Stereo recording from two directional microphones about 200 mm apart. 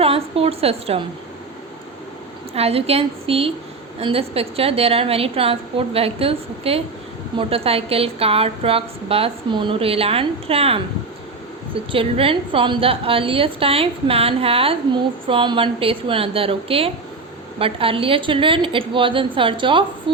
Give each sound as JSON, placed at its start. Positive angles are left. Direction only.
{"t": 0.0, "sound": "a woman's voice", "side_deg": -30}
{"t": 2.6, "sound": "a woman's voice", "side_deg": -30}